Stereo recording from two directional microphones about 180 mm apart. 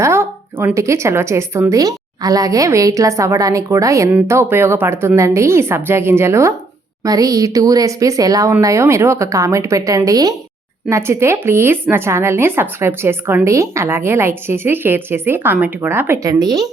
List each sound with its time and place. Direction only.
0.0 s a woman's voice: 15° right (ahead or behind)